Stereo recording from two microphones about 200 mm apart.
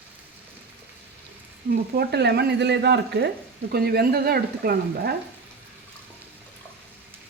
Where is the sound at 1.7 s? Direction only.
55° right (ahead or behind).